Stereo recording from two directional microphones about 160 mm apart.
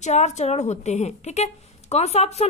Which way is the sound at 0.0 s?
45° left (ahead or behind).